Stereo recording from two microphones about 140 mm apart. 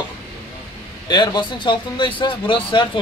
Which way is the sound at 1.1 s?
30° left (ahead or behind).